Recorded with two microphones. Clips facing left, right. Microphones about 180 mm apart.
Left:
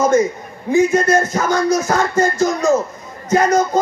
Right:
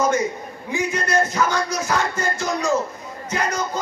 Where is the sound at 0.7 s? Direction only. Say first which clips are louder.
Left 11 dB; 45° left (ahead or behind).